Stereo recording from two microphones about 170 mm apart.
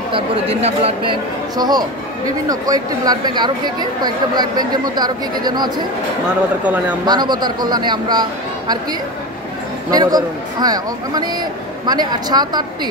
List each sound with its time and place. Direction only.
0.1 s speech: 35° right (ahead or behind)
1.6 s speech: 25° right (ahead or behind)
7.1 s speech: 25° right (ahead or behind)
9.8 s speech: 20° right (ahead or behind)